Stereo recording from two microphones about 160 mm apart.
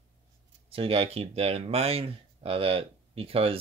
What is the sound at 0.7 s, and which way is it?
Speech, 35° right (ahead or behind).